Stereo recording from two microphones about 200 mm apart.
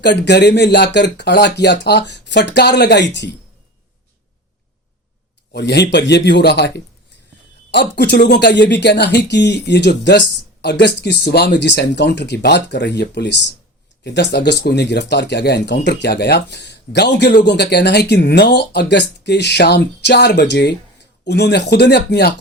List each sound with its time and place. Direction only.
0.0 s speech: 60° left (ahead or behind)
5.5 s speech: 55° left (ahead or behind)